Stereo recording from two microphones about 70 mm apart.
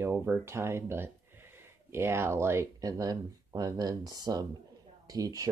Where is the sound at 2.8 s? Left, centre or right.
Right.